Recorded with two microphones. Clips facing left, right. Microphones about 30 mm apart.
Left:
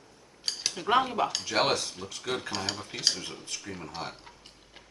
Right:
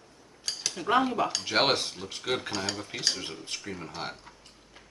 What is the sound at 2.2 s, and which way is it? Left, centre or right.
Cutlery, centre.